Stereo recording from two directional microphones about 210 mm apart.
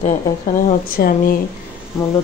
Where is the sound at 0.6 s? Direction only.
45° left (ahead or behind).